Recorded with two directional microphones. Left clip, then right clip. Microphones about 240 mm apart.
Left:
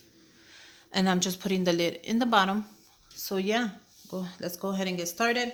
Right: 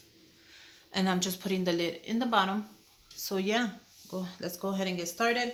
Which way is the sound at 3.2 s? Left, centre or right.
Centre.